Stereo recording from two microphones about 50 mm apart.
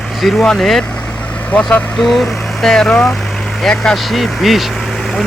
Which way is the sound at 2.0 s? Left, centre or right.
Centre.